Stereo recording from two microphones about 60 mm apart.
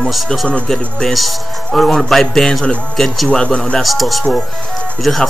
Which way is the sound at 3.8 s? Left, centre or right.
Centre.